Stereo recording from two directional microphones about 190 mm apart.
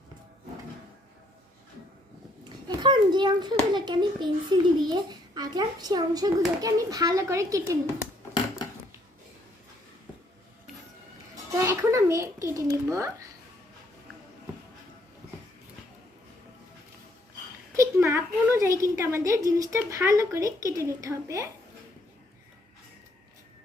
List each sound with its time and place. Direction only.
2.6 s a child's voice: 25° right (ahead or behind)
11.5 s a child's voice: 15° right (ahead or behind)
17.7 s a woman's voice: 15° right (ahead or behind)